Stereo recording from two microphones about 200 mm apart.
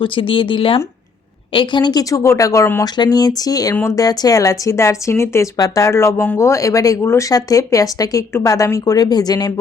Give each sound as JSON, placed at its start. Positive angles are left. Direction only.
{"t": 0.0, "sound": "speech", "side_deg": 25}